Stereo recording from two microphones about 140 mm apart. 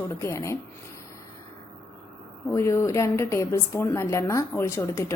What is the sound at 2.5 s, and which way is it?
A woman's voice, 20° left (ahead or behind).